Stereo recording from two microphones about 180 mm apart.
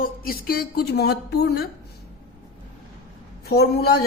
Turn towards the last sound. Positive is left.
turn(degrees=60)  # may be behind; listen again after turning